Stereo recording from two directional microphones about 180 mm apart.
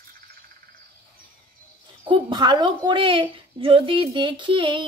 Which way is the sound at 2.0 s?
25° right (ahead or behind).